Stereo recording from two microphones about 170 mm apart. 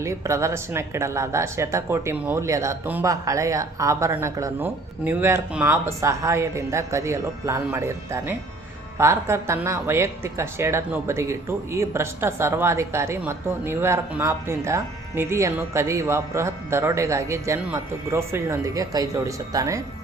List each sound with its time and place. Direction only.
0.0 s speech: 15° right (ahead or behind)